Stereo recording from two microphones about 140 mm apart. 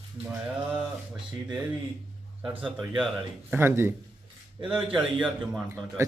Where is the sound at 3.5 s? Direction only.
15° right (ahead or behind).